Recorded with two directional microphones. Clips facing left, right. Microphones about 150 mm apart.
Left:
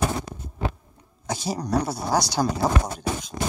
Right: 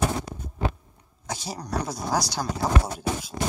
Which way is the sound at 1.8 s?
Centre (ahead or behind).